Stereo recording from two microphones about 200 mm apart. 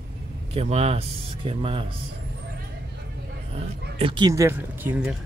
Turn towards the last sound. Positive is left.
turn(degrees=-10)  # may be behind; listen again after turning